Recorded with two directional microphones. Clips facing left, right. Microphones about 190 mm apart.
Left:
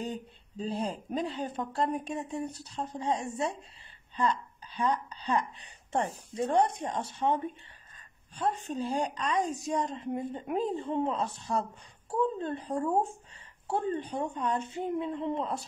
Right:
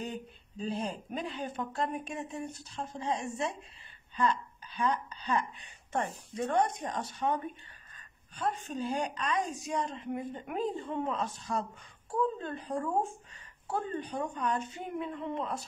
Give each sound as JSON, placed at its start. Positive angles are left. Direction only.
{"t": 0.0, "sound": "a woman's voice", "side_deg": 30}
{"t": 4.7, "sound": "a woman's voice", "side_deg": 35}